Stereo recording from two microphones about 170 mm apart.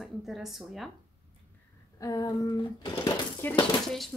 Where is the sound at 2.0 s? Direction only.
20° left (ahead or behind).